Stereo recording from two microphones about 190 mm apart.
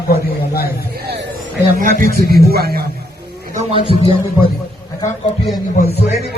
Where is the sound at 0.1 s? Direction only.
55° left (ahead or behind).